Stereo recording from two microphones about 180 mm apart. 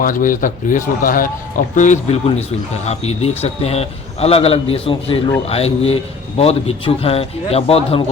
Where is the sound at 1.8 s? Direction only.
40° left (ahead or behind).